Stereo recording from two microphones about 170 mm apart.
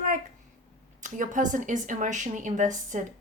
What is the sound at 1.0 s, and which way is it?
Speech, 50° right (ahead or behind).